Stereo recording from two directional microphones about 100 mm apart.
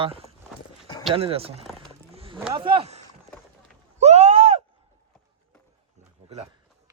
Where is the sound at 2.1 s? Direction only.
75° right (ahead or behind).